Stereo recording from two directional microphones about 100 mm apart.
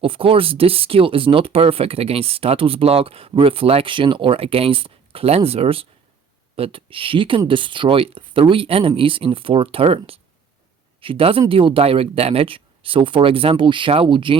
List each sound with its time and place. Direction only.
0.0 s speech: 65° right (ahead or behind)